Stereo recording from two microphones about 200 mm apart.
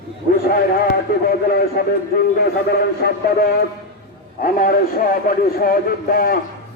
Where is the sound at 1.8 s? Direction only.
50° left (ahead or behind).